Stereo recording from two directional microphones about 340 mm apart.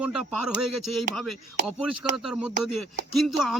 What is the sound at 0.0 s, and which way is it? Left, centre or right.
Speech, centre.